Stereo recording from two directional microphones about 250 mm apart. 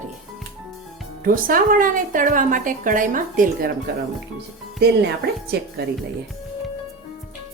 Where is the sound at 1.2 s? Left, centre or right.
Right.